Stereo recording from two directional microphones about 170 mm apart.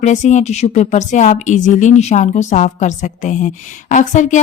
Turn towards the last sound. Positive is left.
turn(degrees=45)  # may be behind; listen again after turning